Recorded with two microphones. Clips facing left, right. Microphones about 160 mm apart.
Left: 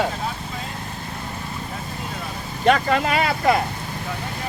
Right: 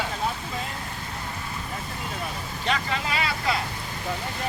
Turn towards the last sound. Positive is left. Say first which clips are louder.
# left 8 dB
turn(degrees=50)  # may be behind; listen again after turning